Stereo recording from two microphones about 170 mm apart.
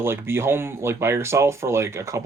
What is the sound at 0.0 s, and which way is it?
Speech, 15° right (ahead or behind).